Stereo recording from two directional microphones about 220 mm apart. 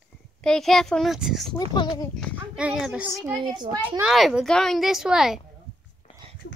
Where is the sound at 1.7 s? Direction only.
20° left (ahead or behind).